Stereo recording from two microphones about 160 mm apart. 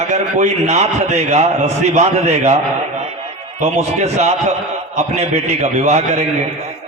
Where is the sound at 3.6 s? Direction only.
40° right (ahead or behind).